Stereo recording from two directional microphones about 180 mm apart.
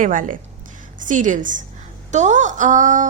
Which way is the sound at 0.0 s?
45° right (ahead or behind).